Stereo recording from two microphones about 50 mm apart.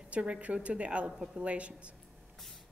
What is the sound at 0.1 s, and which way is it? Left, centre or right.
A woman's voice, right.